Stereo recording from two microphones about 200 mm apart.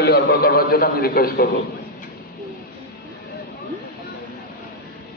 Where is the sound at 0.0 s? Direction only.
50° left (ahead or behind).